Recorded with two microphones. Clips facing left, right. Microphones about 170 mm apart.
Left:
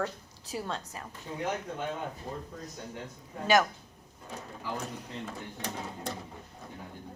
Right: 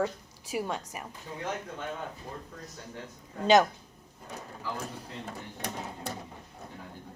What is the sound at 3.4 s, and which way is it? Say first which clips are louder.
Speech: right 3 dB; 20° right (ahead or behind).